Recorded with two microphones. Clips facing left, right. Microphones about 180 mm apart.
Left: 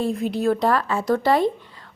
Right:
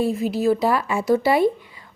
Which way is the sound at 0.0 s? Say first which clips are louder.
Right 2 dB; 5° right (ahead or behind).